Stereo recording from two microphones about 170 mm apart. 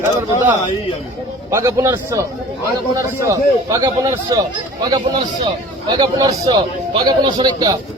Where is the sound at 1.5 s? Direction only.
15° right (ahead or behind).